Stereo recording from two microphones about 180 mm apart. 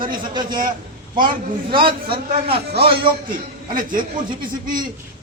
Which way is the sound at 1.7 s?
30° right (ahead or behind).